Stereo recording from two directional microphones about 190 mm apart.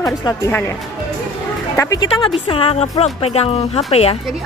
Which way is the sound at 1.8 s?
20° left (ahead or behind).